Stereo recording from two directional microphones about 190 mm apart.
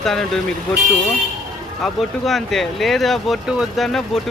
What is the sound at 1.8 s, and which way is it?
Speech, centre (ahead or behind).